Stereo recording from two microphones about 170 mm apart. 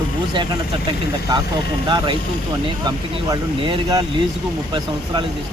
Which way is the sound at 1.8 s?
25° right (ahead or behind).